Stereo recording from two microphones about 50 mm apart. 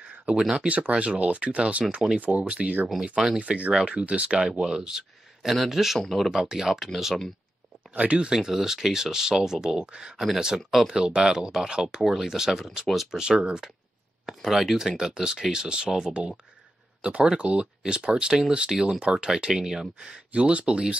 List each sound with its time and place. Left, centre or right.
0.4 s speech: centre
0.7 s speech: right
3.0 s speech: centre
3.3 s speech: right; by 6.3 s centre
6.3 s speech: centre
7.9 s speech: right
8.3 s speech: centre
10.9 s speech: centre
13.2 s speech: centre